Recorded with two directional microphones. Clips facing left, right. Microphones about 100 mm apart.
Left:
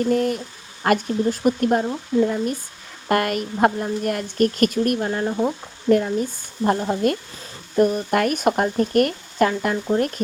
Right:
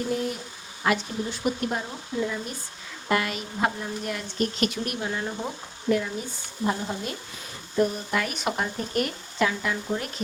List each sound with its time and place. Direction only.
0.1 s speech: 50° left (ahead or behind); by 5.5 s 35° left (ahead or behind)
5.9 s speech: 50° left (ahead or behind)